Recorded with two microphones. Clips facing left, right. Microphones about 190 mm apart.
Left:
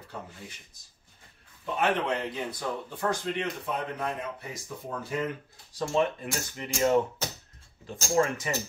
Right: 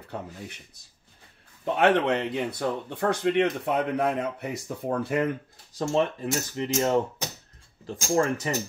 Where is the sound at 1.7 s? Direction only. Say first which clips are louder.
Right 6 dB; 70° right (ahead or behind).